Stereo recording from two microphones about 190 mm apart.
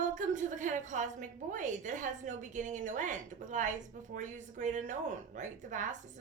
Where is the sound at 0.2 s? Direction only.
40° right (ahead or behind).